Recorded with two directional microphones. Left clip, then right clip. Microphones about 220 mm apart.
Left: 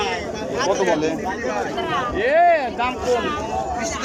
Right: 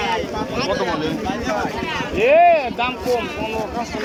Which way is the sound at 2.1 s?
5° right (ahead or behind).